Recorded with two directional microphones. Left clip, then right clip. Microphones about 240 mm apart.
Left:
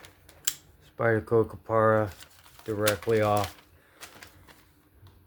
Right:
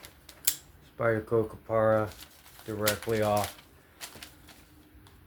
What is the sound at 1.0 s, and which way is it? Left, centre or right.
Rub, left.